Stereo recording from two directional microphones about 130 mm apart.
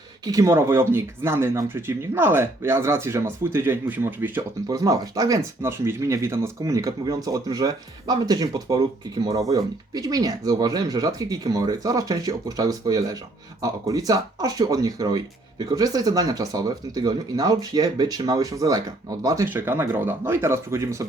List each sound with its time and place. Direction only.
0.3 s speech: 25° right (ahead or behind)
4.7 s speech: 25° right (ahead or behind)